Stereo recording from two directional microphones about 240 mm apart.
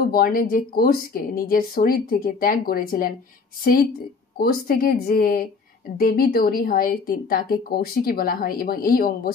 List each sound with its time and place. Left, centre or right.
0.1 s a woman's voice: left
4.4 s a woman's voice: left